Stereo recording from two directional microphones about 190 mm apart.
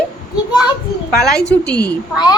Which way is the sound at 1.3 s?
55° left (ahead or behind).